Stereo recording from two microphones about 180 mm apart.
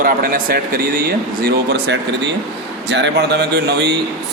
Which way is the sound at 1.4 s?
65° right (ahead or behind).